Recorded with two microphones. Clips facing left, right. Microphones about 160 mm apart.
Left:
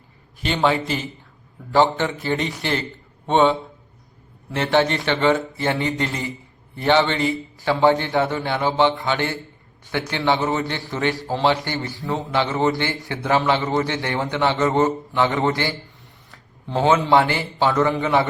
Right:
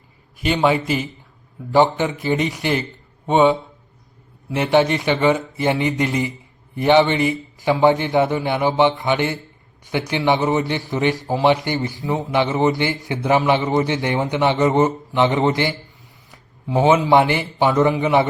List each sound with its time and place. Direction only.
0.3 s a man's voice: 15° right (ahead or behind)
16.7 s a man's voice: 15° right (ahead or behind)